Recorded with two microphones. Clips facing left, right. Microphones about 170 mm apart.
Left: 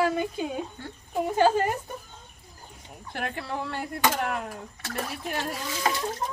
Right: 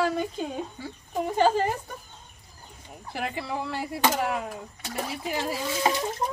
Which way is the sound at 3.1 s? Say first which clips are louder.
Right 1 dB; 5° right (ahead or behind).